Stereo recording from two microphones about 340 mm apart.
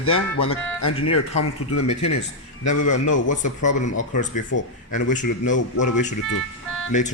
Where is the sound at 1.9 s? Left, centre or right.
Centre.